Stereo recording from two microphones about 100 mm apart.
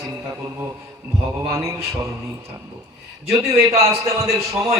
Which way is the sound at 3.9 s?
30° right (ahead or behind).